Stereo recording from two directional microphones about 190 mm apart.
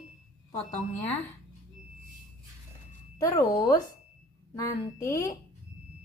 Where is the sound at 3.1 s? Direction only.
15° left (ahead or behind).